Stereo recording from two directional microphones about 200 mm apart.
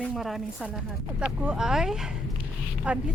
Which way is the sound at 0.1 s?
Centre (ahead or behind).